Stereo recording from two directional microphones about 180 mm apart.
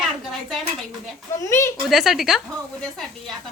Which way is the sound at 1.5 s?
15° left (ahead or behind).